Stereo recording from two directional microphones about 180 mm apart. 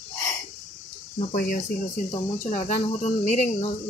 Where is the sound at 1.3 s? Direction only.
50° left (ahead or behind).